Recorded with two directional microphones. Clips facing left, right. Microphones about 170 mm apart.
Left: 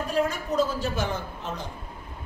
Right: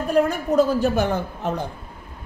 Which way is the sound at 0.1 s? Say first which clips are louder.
Right 8 dB; 60° right (ahead or behind).